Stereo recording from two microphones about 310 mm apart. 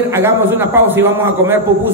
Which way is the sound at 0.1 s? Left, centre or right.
Centre.